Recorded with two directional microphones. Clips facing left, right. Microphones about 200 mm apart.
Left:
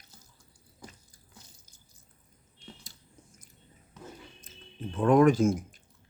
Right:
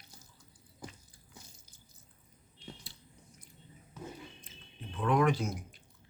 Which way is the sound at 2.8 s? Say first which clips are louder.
Even; 45° left (ahead or behind).